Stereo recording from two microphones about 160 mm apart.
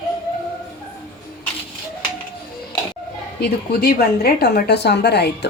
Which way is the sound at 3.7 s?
75° left (ahead or behind).